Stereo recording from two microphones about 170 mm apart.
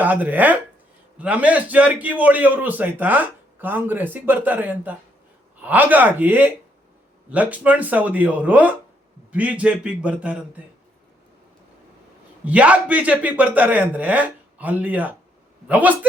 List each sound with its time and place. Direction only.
0.0 s a man's voice: 10° right (ahead or behind)
12.5 s a man's voice: 10° right (ahead or behind)